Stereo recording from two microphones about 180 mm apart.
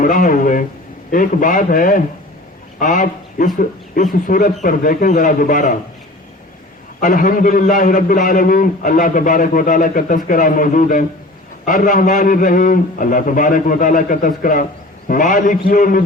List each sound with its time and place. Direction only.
0.0 s a man's voice: 50° left (ahead or behind)
7.0 s a man's voice: 50° left (ahead or behind)